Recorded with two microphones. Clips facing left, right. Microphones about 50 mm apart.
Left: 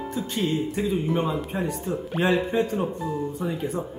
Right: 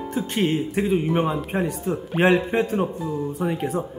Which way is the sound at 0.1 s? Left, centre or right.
Right.